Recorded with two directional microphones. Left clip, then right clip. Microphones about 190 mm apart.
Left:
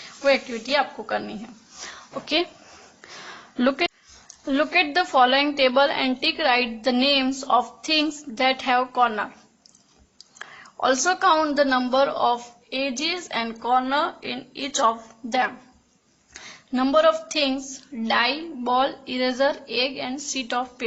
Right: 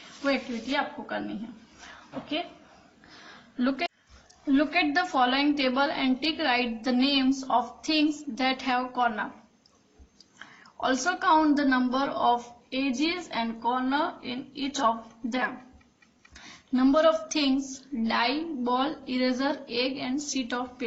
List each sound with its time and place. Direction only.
0.3 s a woman's voice: 45° left (ahead or behind)
3.6 s a woman's voice: 40° left (ahead or behind)
10.3 s a woman's voice: 45° left (ahead or behind)